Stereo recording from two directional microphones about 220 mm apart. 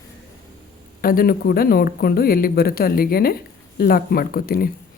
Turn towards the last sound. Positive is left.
turn(degrees=40)  # may be behind; listen again after turning